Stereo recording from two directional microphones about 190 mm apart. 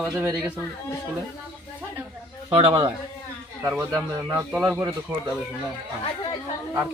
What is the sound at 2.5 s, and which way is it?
Speech, 30° right (ahead or behind).